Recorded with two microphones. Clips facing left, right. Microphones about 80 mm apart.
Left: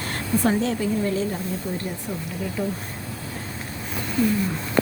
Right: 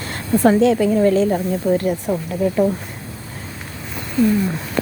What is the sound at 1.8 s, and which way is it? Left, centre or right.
Speech, right.